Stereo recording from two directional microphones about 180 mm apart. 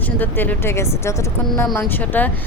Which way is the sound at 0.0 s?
10° left (ahead or behind).